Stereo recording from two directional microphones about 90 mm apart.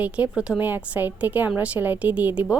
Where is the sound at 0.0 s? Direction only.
15° right (ahead or behind).